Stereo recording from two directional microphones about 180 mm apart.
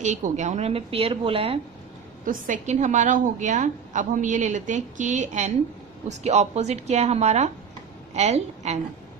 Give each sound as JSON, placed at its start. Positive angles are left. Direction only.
{"t": 0.0, "sound": "a woman's voice", "side_deg": -40}
{"t": 2.2, "sound": "a woman's voice", "side_deg": -45}